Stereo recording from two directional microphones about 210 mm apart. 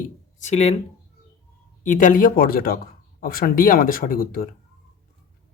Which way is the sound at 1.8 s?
40° left (ahead or behind).